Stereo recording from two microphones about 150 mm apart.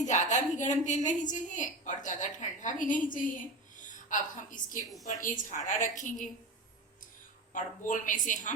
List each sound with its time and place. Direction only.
0.0 s a woman's voice: 55° left (ahead or behind)
7.5 s a woman's voice: 60° left (ahead or behind)